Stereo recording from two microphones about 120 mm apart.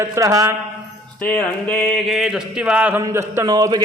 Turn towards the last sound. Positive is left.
turn(degrees=-30)  # may be behind; listen again after turning